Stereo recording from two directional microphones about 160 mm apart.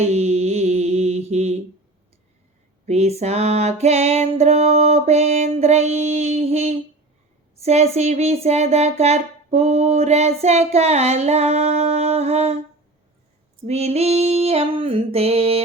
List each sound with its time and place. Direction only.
0.0 s mantra: 40° right (ahead or behind)
2.8 s music: 45° right (ahead or behind)
7.6 s speech: 40° right (ahead or behind)
13.7 s music: 40° right (ahead or behind)